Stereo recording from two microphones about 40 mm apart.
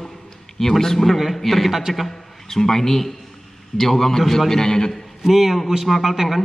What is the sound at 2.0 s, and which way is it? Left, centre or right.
A man's voice, centre.